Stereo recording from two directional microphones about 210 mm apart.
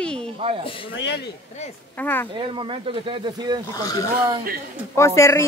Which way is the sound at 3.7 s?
15° left (ahead or behind).